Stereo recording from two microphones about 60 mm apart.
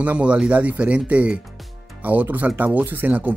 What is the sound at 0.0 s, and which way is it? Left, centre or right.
Speech, right.